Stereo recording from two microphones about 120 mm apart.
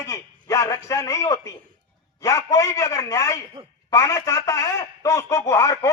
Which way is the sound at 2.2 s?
25° left (ahead or behind).